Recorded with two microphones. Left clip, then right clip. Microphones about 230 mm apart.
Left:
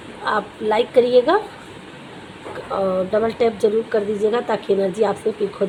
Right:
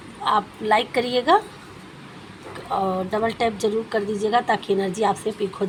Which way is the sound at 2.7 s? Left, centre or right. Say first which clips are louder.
Left 3 dB; right.